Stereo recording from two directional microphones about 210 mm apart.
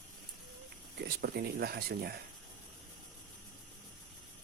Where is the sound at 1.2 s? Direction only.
50° right (ahead or behind).